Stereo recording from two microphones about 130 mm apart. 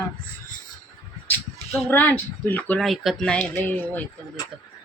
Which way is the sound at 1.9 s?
15° left (ahead or behind).